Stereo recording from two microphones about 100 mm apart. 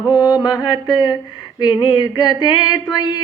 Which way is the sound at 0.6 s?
50° left (ahead or behind).